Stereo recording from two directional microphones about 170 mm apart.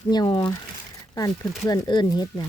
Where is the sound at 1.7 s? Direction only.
25° left (ahead or behind).